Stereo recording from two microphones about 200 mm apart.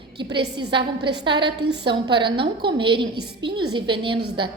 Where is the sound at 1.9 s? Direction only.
25° right (ahead or behind).